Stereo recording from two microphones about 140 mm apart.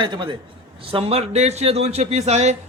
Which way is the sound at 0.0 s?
35° right (ahead or behind).